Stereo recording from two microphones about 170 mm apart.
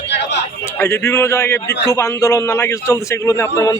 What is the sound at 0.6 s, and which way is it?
A man's voice, 15° left (ahead or behind).